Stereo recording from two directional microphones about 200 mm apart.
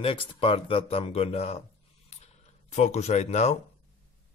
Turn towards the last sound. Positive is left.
turn(degrees=35)  # may be behind; listen again after turning